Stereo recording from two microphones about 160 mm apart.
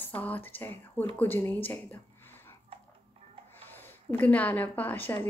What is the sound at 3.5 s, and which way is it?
Speech, 10° left (ahead or behind).